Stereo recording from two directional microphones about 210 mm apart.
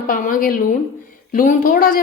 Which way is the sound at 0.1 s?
40° left (ahead or behind).